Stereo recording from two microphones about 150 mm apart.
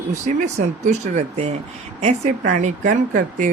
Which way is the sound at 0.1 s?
55° right (ahead or behind).